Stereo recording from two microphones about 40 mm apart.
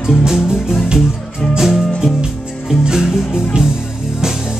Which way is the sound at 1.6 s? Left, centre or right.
Centre.